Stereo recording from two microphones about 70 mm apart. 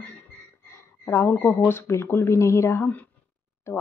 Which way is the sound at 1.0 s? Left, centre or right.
Left.